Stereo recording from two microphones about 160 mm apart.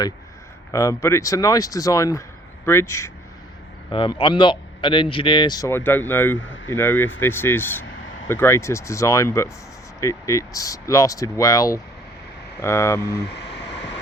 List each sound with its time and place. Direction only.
0.7 s a man's voice: 20° left (ahead or behind)
3.9 s a man's voice: 30° left (ahead or behind)